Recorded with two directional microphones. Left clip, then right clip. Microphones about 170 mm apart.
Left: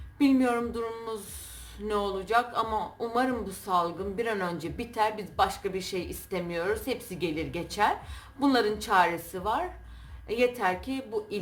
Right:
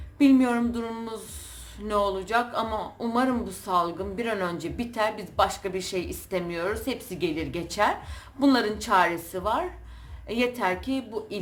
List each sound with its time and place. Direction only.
0.2 s a man's voice: 5° right (ahead or behind)